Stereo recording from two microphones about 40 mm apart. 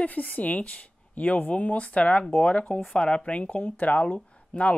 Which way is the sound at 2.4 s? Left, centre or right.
Left.